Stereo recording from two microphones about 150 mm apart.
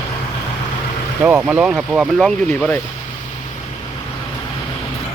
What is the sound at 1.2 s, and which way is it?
Speech, 10° right (ahead or behind).